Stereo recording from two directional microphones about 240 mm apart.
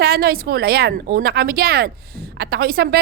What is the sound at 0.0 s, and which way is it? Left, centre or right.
A woman's voice, right.